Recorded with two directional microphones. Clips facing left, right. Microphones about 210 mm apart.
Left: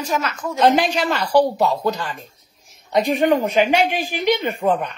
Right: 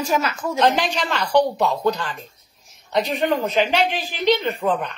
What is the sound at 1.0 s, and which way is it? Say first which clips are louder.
Speech: left 2 dB; 5° left (ahead or behind).